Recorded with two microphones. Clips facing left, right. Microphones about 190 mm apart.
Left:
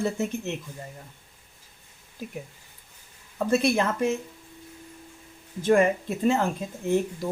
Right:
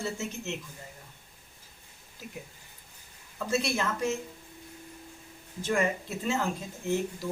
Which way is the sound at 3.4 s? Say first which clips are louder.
Left 7 dB; 55° left (ahead or behind).